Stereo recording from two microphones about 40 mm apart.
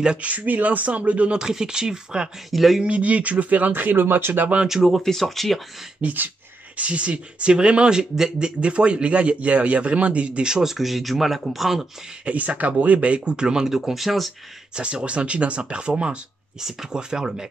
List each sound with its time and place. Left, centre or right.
0.0 s speech: right
0.3 s speech: right
1.4 s speech: centre
2.5 s speech: centre
2.8 s speech: right
4.6 s speech: centre
5.0 s speech: centre
5.9 s speech: right
6.8 s speech: right
10.5 s speech: centre
12.3 s speech: right; by 14.3 s centre
14.8 s speech: right